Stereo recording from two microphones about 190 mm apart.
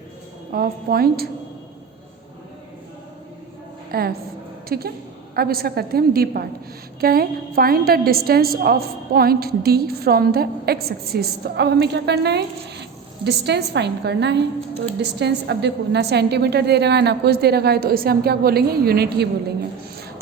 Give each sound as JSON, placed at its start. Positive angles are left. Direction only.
{"t": 0.5, "sound": "a woman's voice", "side_deg": -50}
{"t": 3.9, "sound": "a woman's voice", "side_deg": -55}